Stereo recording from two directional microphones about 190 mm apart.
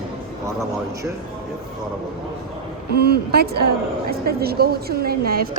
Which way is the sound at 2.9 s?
55° right (ahead or behind).